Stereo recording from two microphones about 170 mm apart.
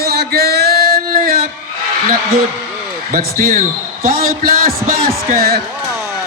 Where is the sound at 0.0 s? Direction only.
65° right (ahead or behind).